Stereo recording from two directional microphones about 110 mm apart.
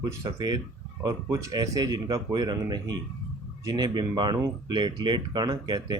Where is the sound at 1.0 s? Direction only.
35° right (ahead or behind).